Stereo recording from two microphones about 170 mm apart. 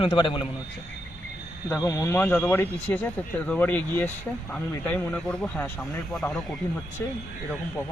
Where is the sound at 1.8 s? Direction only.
15° left (ahead or behind).